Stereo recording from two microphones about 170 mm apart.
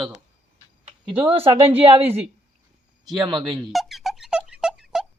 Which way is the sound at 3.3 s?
Centre (ahead or behind).